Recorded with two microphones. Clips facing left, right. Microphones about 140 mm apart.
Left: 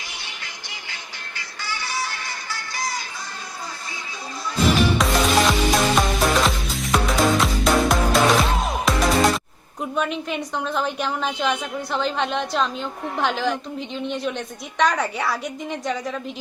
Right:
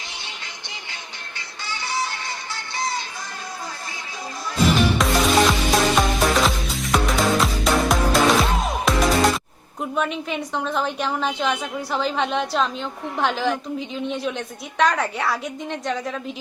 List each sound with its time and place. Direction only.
1.6 s music: 20° right (ahead or behind)
4.5 s music: centre (ahead or behind)
9.8 s a woman's voice: centre (ahead or behind)